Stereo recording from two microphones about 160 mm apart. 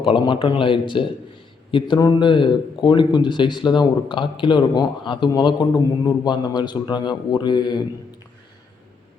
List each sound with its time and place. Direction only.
0.0 s speech: 35° left (ahead or behind)